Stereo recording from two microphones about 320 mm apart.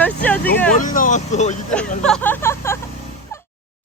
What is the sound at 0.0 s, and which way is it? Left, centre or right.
Vehicle, centre.